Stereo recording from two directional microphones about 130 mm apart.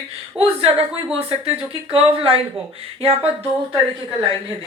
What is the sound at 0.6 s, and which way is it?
Speech, 50° right (ahead or behind).